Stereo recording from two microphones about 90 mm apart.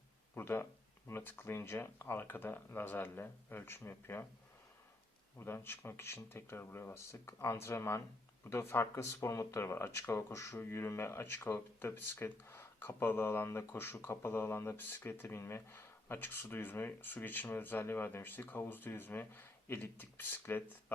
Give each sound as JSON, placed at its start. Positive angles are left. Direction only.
{"t": 0.3, "sound": "speech", "side_deg": 25}
{"t": 5.4, "sound": "speech", "side_deg": 25}